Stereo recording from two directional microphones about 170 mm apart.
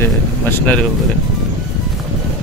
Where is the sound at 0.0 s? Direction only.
15° left (ahead or behind).